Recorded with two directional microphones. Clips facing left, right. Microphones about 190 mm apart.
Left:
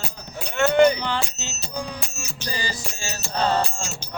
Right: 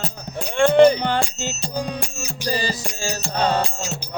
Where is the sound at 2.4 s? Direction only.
35° right (ahead or behind).